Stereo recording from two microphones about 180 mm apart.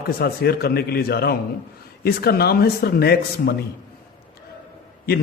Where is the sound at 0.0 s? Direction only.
60° left (ahead or behind).